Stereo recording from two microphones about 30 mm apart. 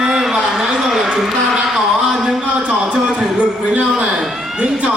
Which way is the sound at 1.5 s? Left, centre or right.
Right.